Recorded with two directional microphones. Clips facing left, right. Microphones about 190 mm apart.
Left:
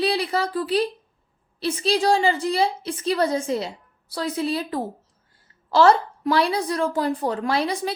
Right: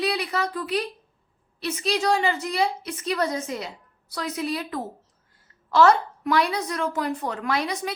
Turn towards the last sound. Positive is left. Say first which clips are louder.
# left 3 dB
turn(degrees=30)  # may be behind; listen again after turning